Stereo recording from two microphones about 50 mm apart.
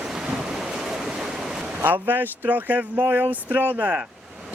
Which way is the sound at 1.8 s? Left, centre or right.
Right.